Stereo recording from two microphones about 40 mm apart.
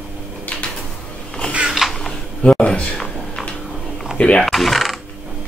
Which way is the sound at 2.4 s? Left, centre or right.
Left.